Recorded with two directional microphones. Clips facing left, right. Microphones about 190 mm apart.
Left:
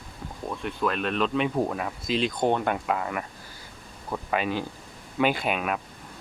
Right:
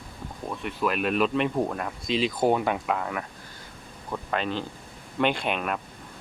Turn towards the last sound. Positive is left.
turn(degrees=5)  # may be behind; listen again after turning